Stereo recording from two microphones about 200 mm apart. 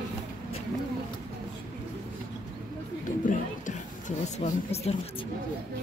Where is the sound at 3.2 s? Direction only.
40° left (ahead or behind).